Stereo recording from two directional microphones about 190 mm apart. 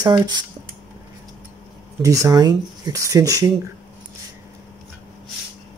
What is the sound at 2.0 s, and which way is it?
Speech, 20° right (ahead or behind).